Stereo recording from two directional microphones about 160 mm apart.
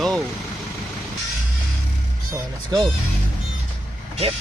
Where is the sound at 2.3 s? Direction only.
20° right (ahead or behind).